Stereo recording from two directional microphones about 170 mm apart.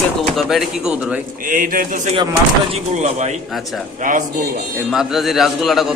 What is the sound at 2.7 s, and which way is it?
A man's voice, 40° right (ahead or behind).